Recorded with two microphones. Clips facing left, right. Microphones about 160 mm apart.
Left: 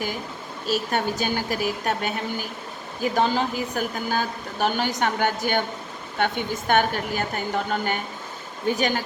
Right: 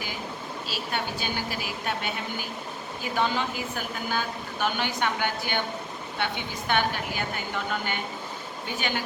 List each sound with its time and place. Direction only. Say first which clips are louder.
0.7 s speech: left 9 dB; 45° left (ahead or behind)